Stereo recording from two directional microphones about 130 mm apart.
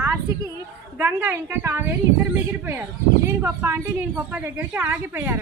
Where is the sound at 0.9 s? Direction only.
20° right (ahead or behind).